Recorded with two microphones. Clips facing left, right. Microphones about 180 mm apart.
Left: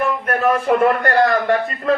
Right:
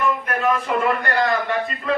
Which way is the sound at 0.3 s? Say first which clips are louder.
Left 8 dB; 45° left (ahead or behind).